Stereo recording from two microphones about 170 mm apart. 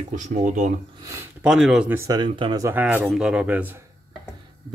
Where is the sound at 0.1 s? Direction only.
50° right (ahead or behind).